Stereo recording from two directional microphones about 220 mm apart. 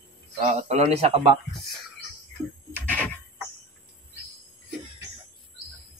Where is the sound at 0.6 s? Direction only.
30° right (ahead or behind).